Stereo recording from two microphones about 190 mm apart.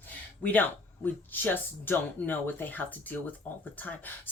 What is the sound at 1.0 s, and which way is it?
Speech, 10° left (ahead or behind).